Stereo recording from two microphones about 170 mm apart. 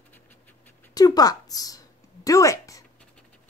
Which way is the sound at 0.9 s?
20° left (ahead or behind).